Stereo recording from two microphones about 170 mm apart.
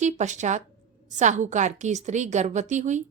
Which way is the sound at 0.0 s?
45° right (ahead or behind).